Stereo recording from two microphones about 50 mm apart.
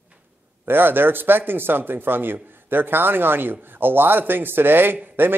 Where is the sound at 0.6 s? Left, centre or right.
Right.